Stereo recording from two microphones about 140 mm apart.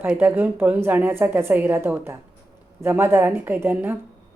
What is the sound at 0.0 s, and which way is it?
A woman's voice, 15° right (ahead or behind).